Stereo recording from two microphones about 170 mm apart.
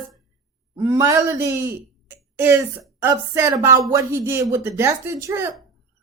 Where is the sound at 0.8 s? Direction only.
15° right (ahead or behind).